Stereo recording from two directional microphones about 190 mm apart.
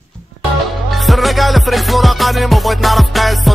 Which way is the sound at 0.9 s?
Centre (ahead or behind).